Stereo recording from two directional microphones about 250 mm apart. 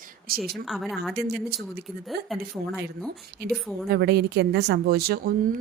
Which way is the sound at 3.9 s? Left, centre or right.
Right.